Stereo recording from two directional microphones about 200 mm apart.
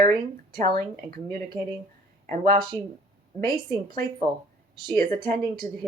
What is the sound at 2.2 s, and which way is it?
Speech, 40° right (ahead or behind).